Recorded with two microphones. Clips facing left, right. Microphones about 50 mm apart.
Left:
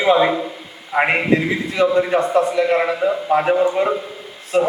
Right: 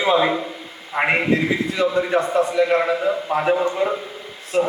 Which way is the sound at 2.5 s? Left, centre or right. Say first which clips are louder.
Left 1 dB; centre.